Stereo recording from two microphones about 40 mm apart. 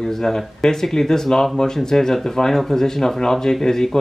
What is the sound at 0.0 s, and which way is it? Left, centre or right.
Speech, centre.